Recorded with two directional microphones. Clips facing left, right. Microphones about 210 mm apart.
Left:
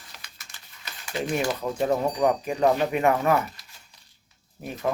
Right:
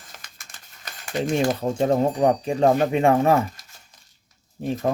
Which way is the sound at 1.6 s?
30° right (ahead or behind).